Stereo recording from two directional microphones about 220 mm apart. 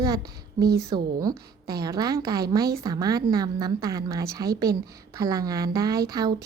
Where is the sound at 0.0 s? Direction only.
15° right (ahead or behind).